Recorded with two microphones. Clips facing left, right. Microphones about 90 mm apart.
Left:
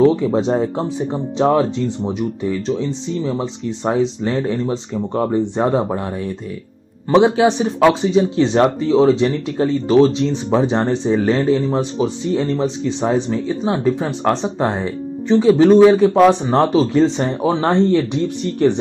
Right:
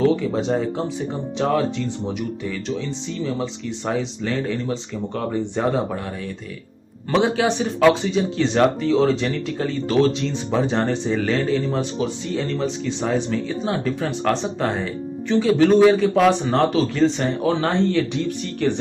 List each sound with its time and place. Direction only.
0.0 s speech: 30° left (ahead or behind)
7.2 s speech: 25° left (ahead or behind)